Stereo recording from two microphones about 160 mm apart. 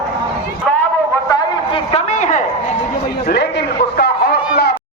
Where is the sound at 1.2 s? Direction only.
25° left (ahead or behind).